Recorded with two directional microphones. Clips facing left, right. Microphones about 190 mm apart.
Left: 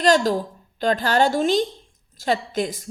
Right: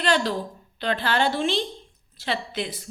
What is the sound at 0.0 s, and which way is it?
A woman's voice, 40° left (ahead or behind).